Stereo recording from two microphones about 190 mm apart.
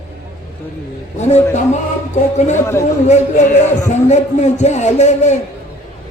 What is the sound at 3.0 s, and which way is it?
A man's voice, 40° left (ahead or behind).